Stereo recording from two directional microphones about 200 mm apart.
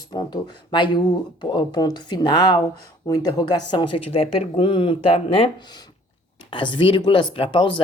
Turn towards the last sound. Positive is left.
turn(degrees=25)  # may be behind; listen again after turning